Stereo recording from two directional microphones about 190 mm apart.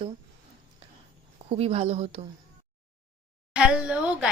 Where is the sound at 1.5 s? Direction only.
35° right (ahead or behind).